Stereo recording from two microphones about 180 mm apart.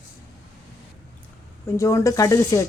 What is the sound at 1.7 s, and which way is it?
Speech, 15° left (ahead or behind).